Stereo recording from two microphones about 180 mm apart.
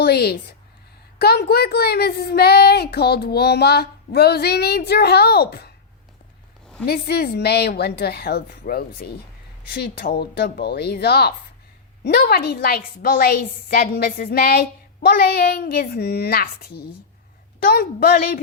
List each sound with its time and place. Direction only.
0.0 s a woman's voice: 60° left (ahead or behind)
6.8 s a woman's voice: 60° left (ahead or behind)